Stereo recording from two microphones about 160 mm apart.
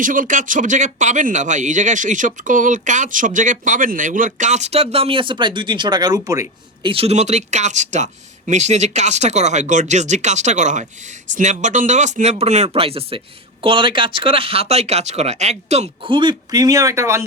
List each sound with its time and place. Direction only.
0.0 s speech: 55° right (ahead or behind); by 6.5 s 20° right (ahead or behind)
6.8 s speech: 35° right (ahead or behind)
16.0 s speech: 30° right (ahead or behind)